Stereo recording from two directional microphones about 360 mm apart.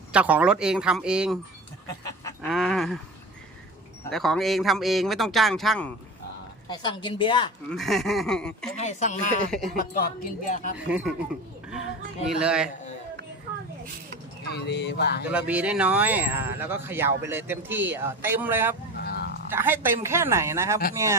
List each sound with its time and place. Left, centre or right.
0.1 s speech: centre
2.0 s livestock: centre
4.1 s speech: centre
6.7 s a woman's voice: centre
7.7 s speech: centre
8.7 s speech: centre
10.8 s speech: centre
12.4 s speech: centre
14.4 s speech: left
15.3 s speech: centre
19.0 s a sound: left
19.5 s a woman's voice: centre